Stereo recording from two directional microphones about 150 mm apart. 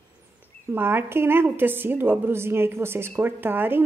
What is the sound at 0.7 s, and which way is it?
A woman's voice, 15° right (ahead or behind).